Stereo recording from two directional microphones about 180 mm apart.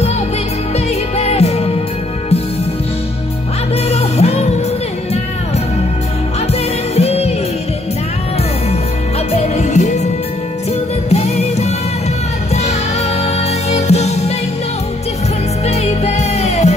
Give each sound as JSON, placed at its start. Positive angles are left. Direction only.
{"t": 0.7, "sound": "music", "side_deg": 35}
{"t": 3.9, "sound": "music", "side_deg": 35}
{"t": 7.0, "sound": "music", "side_deg": 35}
{"t": 9.3, "sound": "music", "side_deg": 40}
{"t": 13.2, "sound": "music", "side_deg": 35}
{"t": 15.6, "sound": "music", "side_deg": 35}